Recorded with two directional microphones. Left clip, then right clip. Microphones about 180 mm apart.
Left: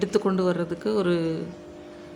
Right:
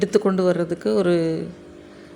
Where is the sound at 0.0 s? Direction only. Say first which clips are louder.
Right 5 dB; 15° right (ahead or behind).